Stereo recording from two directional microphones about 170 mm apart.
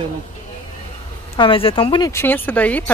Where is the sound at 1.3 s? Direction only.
30° left (ahead or behind).